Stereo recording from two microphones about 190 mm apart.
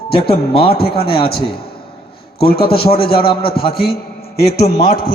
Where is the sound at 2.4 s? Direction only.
55° left (ahead or behind).